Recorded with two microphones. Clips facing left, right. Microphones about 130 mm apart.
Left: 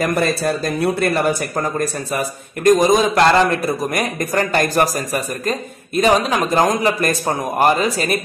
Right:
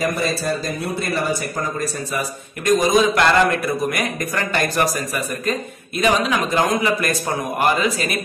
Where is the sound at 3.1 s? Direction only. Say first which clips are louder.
Left 3 dB; 30° left (ahead or behind).